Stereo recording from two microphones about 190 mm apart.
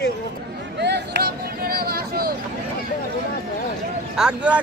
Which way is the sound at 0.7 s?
60° right (ahead or behind).